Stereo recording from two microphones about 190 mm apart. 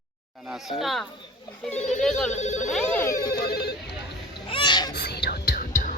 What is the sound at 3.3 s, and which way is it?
Telephone bell ringing, 55° left (ahead or behind).